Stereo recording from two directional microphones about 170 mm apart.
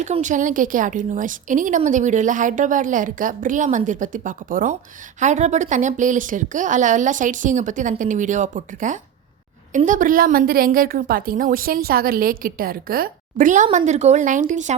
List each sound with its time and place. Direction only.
0.0 s a woman's voice: 45° right (ahead or behind)